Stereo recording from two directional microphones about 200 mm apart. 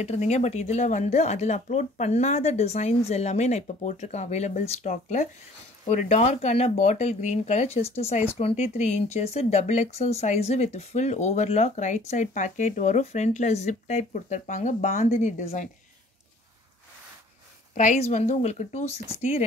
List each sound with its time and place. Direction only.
0.0 s speech: 35° left (ahead or behind)
17.7 s speech: 35° left (ahead or behind)